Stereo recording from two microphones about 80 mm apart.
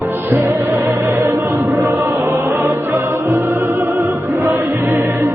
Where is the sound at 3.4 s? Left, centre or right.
Right.